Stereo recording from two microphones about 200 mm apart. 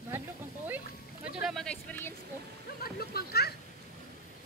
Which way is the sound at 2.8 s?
50° left (ahead or behind).